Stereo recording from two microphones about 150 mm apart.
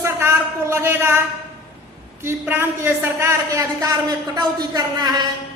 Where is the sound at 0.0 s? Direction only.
15° right (ahead or behind).